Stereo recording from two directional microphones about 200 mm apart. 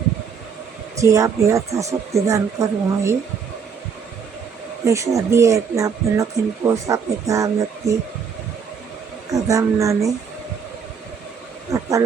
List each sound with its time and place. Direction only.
0.9 s speech: 15° right (ahead or behind)
4.9 s speech: 15° right (ahead or behind)
9.3 s speech: 15° right (ahead or behind)
11.7 s a sound: 15° right (ahead or behind)